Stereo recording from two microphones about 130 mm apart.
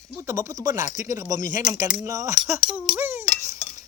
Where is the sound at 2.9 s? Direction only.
15° right (ahead or behind).